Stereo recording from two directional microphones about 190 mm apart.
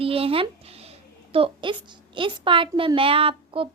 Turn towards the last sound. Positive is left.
turn(degrees=-30)  # may be behind; listen again after turning